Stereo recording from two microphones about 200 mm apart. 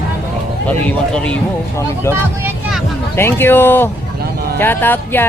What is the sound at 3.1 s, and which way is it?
Speech, 10° left (ahead or behind).